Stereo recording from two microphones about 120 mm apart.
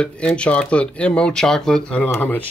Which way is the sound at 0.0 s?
10° left (ahead or behind).